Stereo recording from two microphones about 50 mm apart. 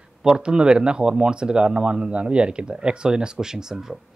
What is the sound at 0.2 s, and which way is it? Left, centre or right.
Speech, centre.